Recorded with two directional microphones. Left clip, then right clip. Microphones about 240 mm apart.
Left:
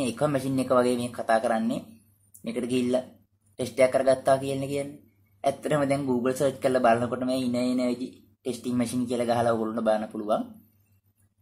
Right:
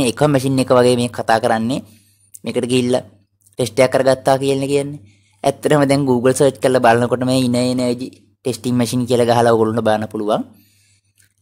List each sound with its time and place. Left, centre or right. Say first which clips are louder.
0.0 s a man's voice: right 11 dB; right